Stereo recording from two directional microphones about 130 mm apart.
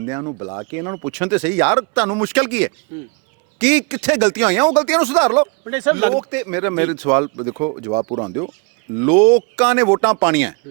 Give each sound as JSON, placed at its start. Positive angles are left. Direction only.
{"t": 0.0, "sound": "speech", "side_deg": -25}